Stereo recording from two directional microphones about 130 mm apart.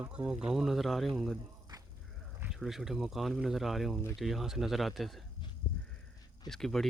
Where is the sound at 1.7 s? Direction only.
30° right (ahead or behind).